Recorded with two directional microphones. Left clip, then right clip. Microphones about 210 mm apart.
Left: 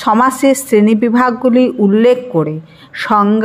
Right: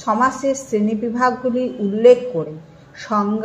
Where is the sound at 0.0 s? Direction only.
35° left (ahead or behind).